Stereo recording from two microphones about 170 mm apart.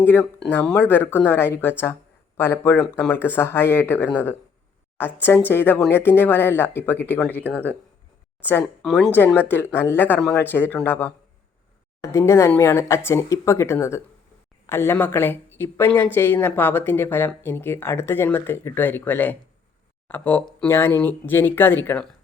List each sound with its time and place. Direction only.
0.0 s a woman's voice: 10° left (ahead or behind)